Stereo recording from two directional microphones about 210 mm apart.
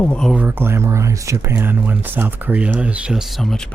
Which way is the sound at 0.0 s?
5° left (ahead or behind).